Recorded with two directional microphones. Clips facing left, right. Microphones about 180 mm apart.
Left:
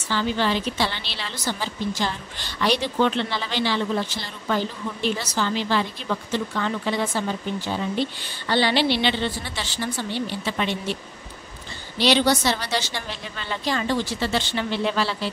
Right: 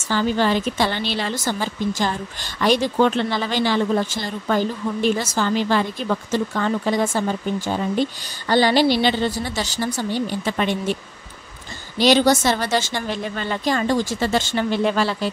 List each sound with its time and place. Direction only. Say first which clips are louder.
0.0 s a woman's voice: right 4 dB; 45° right (ahead or behind)
12.0 s a woman's voice: right 4 dB; 45° right (ahead or behind)